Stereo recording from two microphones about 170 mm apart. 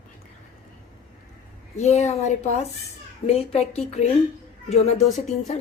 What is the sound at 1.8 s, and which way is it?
A woman's voice, 40° left (ahead or behind).